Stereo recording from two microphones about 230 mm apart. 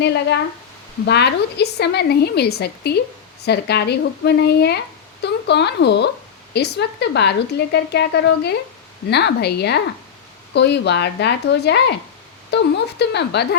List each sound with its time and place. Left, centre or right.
0.0 s a woman's voice: left